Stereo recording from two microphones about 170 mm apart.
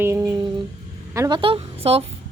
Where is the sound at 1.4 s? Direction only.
35° right (ahead or behind).